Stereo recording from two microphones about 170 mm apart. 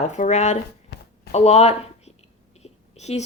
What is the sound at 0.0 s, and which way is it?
Speech, 45° left (ahead or behind).